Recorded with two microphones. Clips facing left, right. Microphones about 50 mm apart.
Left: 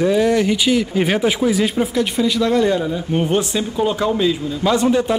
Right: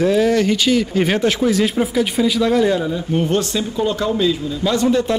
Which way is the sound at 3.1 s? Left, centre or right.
Centre.